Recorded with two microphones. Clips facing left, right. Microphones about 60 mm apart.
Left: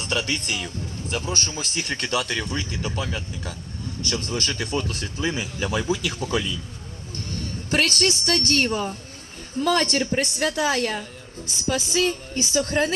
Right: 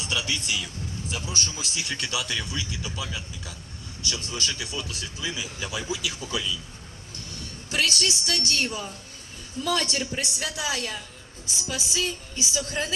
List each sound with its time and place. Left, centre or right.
0.0 s speech: left